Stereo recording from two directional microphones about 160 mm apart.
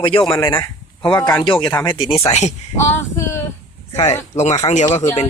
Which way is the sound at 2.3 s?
45° left (ahead or behind).